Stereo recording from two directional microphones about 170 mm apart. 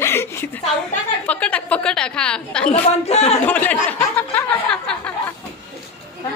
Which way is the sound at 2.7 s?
40° left (ahead or behind).